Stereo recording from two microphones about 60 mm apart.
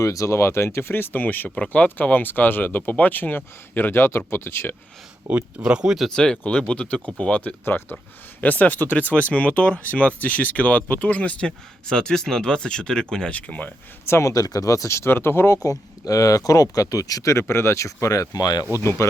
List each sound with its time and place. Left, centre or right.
0.0 s speech: left
1.5 s speech: centre
1.7 s speech: left
5.3 s speech: right
5.7 s speech: centre
6.1 s speech: centre
7.6 s speech: left
14.1 s speech: left
14.3 s speech: left
15.6 s speech: left
17.4 s speech: left
18.8 s speech: left